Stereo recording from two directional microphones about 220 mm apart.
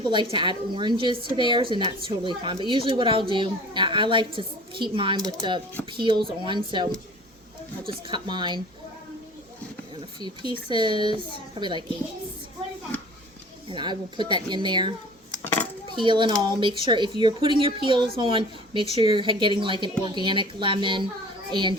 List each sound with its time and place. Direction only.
0.0 s a woman's voice: 20° right (ahead or behind)
8.0 s a woman's voice: 20° right (ahead or behind)
10.2 s a woman's voice: 20° right (ahead or behind)
13.7 s a woman's voice: 20° right (ahead or behind)
15.9 s a woman's voice: 20° right (ahead or behind)